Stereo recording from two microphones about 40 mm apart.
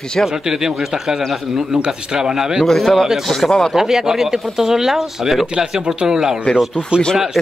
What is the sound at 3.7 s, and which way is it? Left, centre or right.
Speech, centre.